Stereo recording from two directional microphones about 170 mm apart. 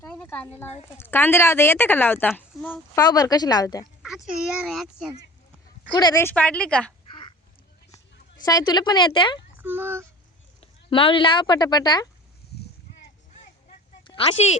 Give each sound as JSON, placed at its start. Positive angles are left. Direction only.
{"t": 0.1, "sound": "a sound", "side_deg": 10}
{"t": 0.9, "sound": "speech", "side_deg": 10}
{"t": 2.9, "sound": "speech", "side_deg": 25}
{"t": 4.4, "sound": "speech", "side_deg": 0}
{"t": 5.9, "sound": "speech", "side_deg": 25}
{"t": 6.2, "sound": "speech", "side_deg": 10}
{"t": 8.4, "sound": "speech", "side_deg": 25}
{"t": 9.6, "sound": "speech", "side_deg": -10}
{"t": 10.6, "sound": "speech", "side_deg": 30}
{"t": 14.0, "sound": "a sound", "side_deg": 30}